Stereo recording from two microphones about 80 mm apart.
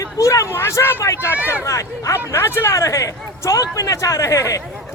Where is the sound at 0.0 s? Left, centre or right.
Left.